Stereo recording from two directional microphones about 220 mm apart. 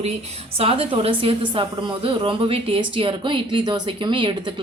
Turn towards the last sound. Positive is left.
turn(degrees=-20)  # may be behind; listen again after turning